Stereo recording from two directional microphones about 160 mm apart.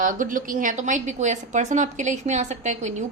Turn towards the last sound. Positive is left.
turn(degrees=-45)  # may be behind; listen again after turning